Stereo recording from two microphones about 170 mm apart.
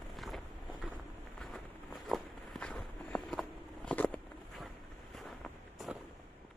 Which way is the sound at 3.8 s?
10° left (ahead or behind).